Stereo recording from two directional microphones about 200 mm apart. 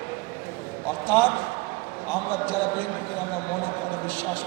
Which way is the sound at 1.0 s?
5° left (ahead or behind).